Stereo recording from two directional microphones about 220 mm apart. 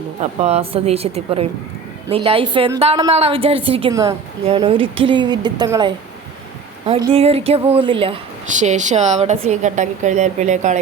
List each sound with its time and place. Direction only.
0.2 s a woman's voice: 30° right (ahead or behind)
7.0 s speech: 25° right (ahead or behind)